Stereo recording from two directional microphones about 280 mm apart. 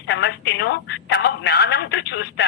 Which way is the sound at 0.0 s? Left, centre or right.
Left.